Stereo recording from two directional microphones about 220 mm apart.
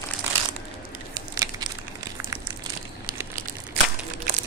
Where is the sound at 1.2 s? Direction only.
15° right (ahead or behind).